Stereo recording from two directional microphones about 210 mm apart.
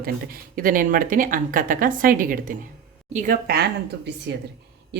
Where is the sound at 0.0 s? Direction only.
45° right (ahead or behind).